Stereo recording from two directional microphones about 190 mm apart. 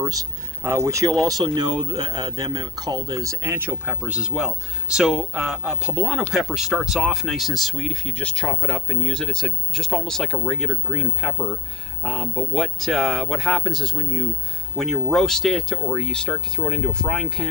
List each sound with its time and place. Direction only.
0.0 s speech: 20° right (ahead or behind); by 17.4 s centre (ahead or behind)